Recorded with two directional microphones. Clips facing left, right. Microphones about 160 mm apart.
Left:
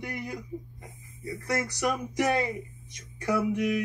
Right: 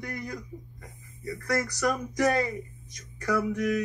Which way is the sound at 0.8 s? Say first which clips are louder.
Right 1 dB; 20° left (ahead or behind).